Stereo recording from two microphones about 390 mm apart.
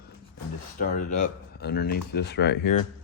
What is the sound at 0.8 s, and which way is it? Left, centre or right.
Speech, centre.